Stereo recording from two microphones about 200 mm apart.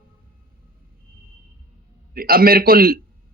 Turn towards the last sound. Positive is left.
turn(degrees=-45)  # may be behind; listen again after turning